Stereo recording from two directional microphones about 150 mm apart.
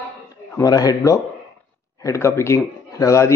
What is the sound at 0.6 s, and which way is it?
A man's voice, 25° left (ahead or behind).